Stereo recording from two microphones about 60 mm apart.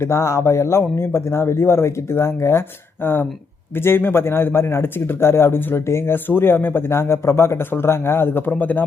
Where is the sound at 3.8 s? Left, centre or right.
Left.